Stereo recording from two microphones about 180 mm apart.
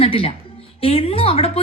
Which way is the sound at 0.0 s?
30° left (ahead or behind).